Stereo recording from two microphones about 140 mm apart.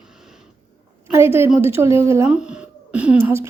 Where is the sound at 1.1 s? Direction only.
15° right (ahead or behind).